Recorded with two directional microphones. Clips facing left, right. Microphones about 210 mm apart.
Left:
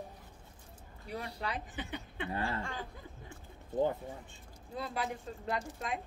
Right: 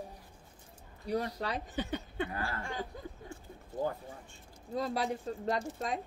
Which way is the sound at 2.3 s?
25° left (ahead or behind).